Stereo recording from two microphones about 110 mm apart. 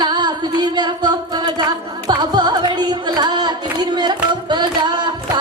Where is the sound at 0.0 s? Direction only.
40° right (ahead or behind).